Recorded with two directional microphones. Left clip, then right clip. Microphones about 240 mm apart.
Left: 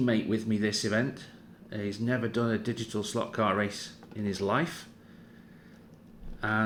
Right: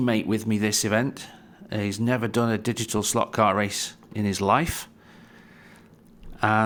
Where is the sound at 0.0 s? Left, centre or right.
Right.